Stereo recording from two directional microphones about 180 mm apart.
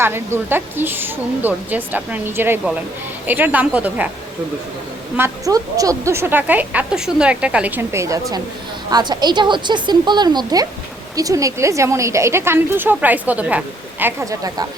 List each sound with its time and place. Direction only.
0.0 s speech: 15° right (ahead or behind)
5.1 s speech: 15° right (ahead or behind)